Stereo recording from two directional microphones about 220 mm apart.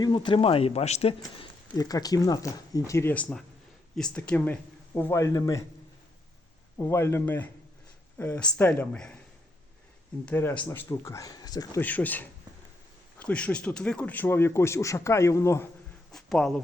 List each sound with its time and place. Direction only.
0.0 s speech: 20° left (ahead or behind)
6.7 s speech: 10° left (ahead or behind)
10.2 s speech: 10° left (ahead or behind)
16.1 s speech: centre (ahead or behind)